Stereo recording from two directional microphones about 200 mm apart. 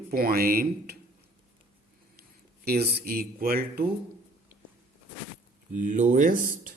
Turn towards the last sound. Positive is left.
turn(degrees=-40)  # may be behind; listen again after turning